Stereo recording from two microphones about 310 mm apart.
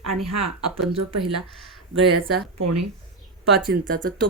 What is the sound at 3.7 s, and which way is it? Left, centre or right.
Speech, right.